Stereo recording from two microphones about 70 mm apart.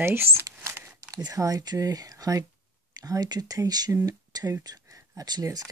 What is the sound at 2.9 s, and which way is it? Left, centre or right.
Speech, right.